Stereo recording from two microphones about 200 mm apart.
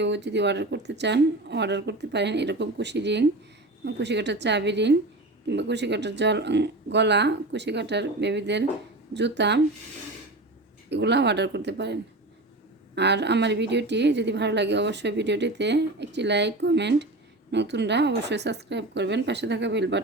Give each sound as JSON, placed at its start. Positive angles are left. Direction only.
{"t": 0.0, "sound": "a woman's voice", "side_deg": -60}
{"t": 10.8, "sound": "a woman's voice", "side_deg": -60}
{"t": 13.0, "sound": "a woman's voice", "side_deg": -60}